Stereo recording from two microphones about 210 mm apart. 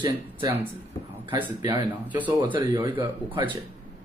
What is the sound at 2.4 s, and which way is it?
Speech, 20° right (ahead or behind).